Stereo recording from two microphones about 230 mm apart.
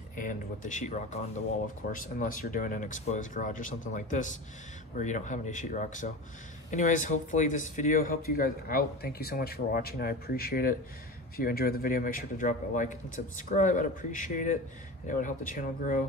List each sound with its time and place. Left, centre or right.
0.1 s speech: left